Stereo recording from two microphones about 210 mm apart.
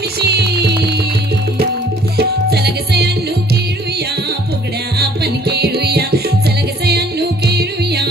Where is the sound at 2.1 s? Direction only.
50° right (ahead or behind).